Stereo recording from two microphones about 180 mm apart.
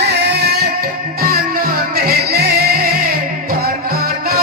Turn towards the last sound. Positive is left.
turn(degrees=-55)  # may be behind; listen again after turning